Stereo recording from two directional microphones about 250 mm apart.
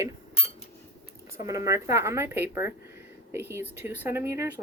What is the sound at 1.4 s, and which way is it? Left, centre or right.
Speech, centre.